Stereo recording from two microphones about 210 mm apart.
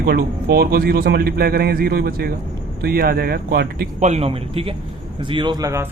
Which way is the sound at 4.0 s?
30° right (ahead or behind).